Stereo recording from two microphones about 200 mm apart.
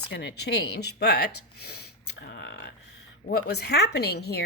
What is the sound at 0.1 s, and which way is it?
Speech, 55° left (ahead or behind).